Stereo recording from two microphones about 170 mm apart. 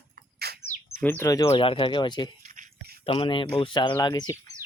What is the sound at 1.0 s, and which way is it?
Speech, 10° left (ahead or behind).